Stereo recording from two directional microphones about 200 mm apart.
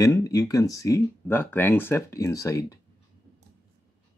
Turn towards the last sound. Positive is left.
turn(degrees=15)  # may be behind; listen again after turning